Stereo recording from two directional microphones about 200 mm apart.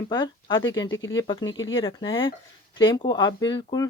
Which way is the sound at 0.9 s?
75° left (ahead or behind).